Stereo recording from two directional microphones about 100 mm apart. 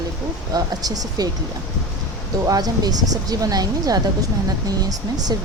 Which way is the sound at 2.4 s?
40° right (ahead or behind).